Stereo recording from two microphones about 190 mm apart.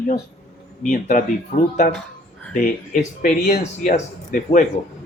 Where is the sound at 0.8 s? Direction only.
45° left (ahead or behind).